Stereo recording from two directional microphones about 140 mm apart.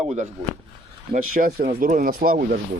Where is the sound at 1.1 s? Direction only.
85° right.